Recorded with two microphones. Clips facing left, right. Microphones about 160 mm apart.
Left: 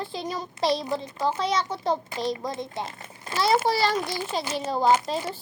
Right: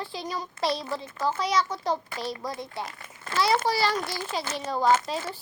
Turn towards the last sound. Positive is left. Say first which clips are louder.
# left 3 dB
turn(degrees=15)  # may be behind; listen again after turning